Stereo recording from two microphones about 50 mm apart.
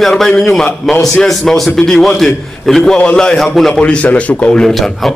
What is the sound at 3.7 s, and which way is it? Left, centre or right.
Speech, left.